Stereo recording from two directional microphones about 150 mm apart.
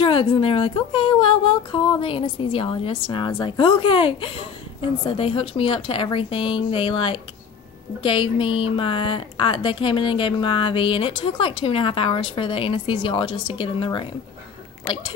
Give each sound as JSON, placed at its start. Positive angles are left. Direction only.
{"t": 0.0, "sound": "a woman's voice", "side_deg": 35}